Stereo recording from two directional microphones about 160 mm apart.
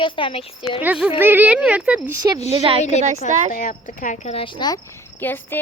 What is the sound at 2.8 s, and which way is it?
Speech, 45° left (ahead or behind).